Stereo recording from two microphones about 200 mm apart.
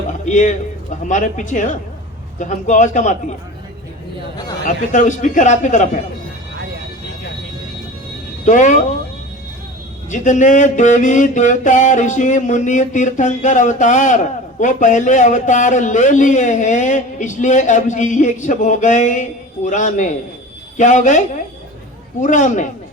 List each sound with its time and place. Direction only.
0.3 s a man's voice: 40° left (ahead or behind)
4.6 s a man's voice: 35° left (ahead or behind)
8.4 s a man's voice: 40° left (ahead or behind)
10.1 s a man's voice: 40° left (ahead or behind)